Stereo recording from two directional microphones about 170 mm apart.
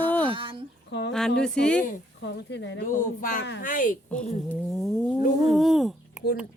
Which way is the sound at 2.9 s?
55° left (ahead or behind).